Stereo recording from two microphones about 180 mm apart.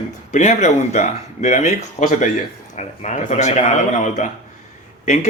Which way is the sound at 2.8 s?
40° left (ahead or behind).